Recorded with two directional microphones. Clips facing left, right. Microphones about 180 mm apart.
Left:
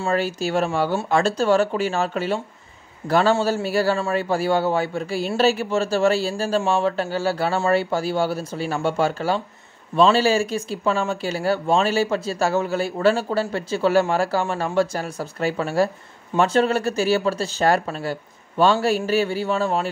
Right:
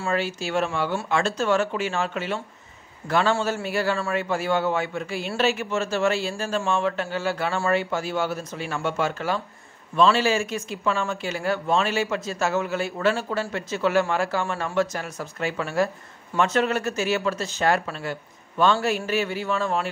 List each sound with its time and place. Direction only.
0.0 s speech: 40° left (ahead or behind)